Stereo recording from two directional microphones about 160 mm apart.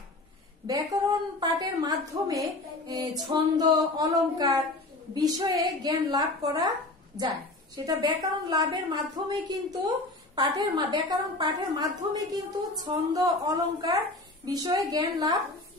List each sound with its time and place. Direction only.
1.4 s a woman's voice: 25° right (ahead or behind)